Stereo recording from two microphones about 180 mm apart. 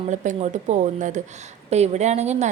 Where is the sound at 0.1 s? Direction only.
40° right (ahead or behind).